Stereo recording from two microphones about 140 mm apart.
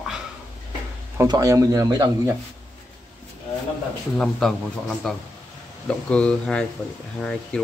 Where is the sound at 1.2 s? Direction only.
25° right (ahead or behind).